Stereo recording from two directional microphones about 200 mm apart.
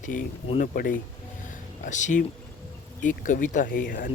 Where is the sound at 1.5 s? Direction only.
40° left (ahead or behind).